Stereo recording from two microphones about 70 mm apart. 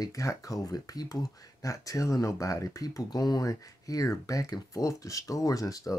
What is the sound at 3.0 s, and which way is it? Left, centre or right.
Speech, left.